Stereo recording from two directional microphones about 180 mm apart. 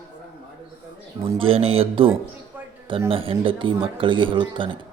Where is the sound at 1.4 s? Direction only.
30° right (ahead or behind).